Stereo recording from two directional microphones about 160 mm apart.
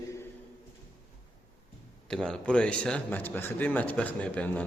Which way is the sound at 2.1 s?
5° left (ahead or behind).